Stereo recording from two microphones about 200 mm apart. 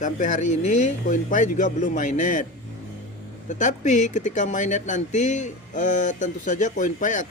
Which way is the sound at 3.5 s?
40° left (ahead or behind).